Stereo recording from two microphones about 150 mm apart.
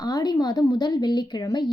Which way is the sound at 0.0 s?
25° left (ahead or behind).